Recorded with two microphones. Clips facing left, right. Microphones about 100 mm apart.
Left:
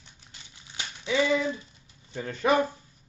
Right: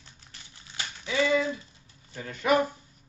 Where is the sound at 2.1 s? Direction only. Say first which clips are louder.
Left 1 dB; 25° left (ahead or behind).